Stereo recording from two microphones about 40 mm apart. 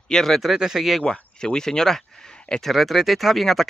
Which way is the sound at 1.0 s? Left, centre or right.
Centre.